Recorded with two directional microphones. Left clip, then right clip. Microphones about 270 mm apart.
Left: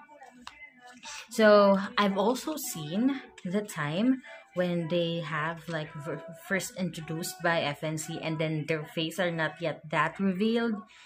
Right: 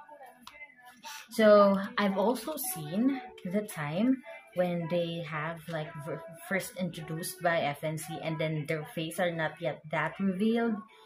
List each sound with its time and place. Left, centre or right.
1.3 s speech: centre